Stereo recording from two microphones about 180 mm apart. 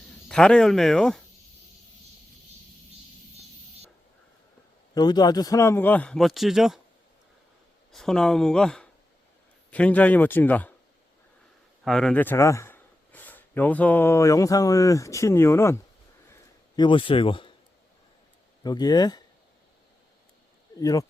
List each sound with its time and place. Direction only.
0.3 s speech: 5° left (ahead or behind)
4.9 s speech: 20° left (ahead or behind); by 6.7 s centre (ahead or behind)
7.9 s speech: 5° left (ahead or behind)
11.9 s speech: 5° left (ahead or behind)
16.3 s a sound: 25° left (ahead or behind)
18.6 s speech: 25° left (ahead or behind)
20.7 s speech: 20° left (ahead or behind)